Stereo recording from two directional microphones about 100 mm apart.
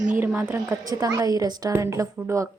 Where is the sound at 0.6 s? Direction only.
35° right (ahead or behind).